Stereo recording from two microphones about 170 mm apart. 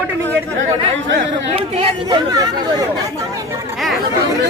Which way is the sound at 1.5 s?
35° right (ahead or behind).